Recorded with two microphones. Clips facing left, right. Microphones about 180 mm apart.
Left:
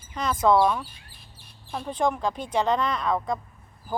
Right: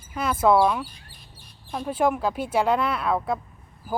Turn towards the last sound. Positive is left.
turn(degrees=-5)  # may be behind; listen again after turning